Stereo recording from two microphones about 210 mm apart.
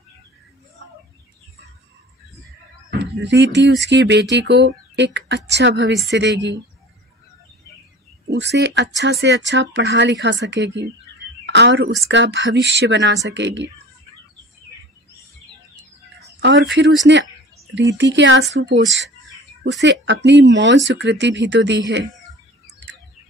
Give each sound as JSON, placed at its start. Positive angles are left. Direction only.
{"t": 2.9, "sound": "speech", "side_deg": -55}
{"t": 8.3, "sound": "speech", "side_deg": -55}
{"t": 16.3, "sound": "a sound", "side_deg": -55}
{"t": 16.7, "sound": "speech", "side_deg": -60}